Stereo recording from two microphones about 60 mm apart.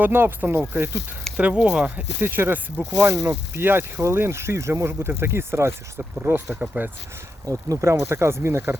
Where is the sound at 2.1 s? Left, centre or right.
Right.